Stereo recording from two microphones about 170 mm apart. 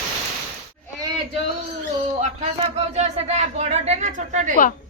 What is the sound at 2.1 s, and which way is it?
A man's voice, 40° right (ahead or behind).